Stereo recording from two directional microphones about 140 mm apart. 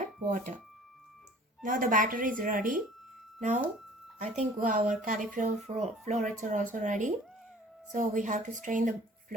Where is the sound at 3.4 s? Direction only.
60° right (ahead or behind).